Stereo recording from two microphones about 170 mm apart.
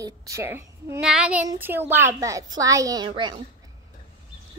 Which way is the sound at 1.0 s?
5° right (ahead or behind).